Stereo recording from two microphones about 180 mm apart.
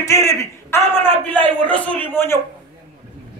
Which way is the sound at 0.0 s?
15° left (ahead or behind).